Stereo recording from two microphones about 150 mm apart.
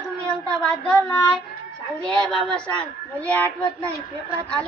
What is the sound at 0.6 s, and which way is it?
A woman's voice, 5° left (ahead or behind).